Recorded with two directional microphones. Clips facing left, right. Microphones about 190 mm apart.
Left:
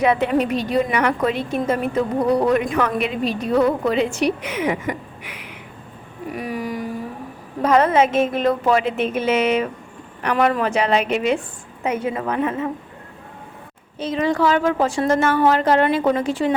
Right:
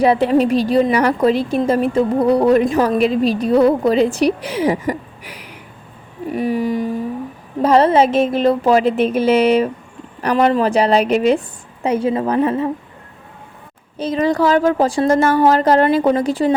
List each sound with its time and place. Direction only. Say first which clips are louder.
0.0 s a woman's voice: right 5 dB; 35° right (ahead or behind)
6.3 s a sound: right 8 dB; 25° right (ahead or behind)
7.6 s a woman's voice: right 4 dB; 30° right (ahead or behind)
14.0 s a woman's voice: right 3 dB; 40° right (ahead or behind)